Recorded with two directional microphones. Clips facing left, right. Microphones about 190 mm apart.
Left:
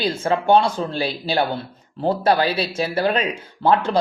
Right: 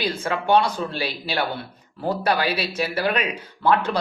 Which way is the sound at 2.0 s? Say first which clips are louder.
Left 4 dB; 25° left (ahead or behind).